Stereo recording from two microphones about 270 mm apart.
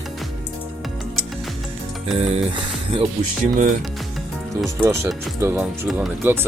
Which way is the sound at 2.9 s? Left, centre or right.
Right.